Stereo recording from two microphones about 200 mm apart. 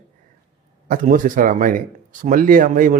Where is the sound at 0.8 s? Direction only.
45° right (ahead or behind).